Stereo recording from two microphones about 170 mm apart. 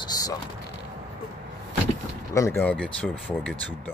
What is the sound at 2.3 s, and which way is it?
Speech, 15° left (ahead or behind).